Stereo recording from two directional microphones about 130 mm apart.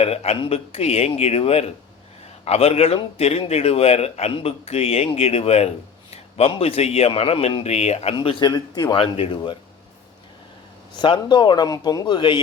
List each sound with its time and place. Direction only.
0.0 s speech: 55° left (ahead or behind)
8.1 s speech: 40° left (ahead or behind)
9.0 s speech: 45° left (ahead or behind)
10.9 s speech: 35° left (ahead or behind)